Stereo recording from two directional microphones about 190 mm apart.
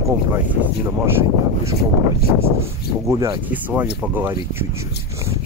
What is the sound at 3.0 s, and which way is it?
Speech, 15° right (ahead or behind).